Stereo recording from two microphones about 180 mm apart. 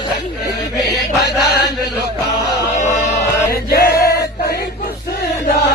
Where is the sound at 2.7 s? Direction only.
40° left (ahead or behind).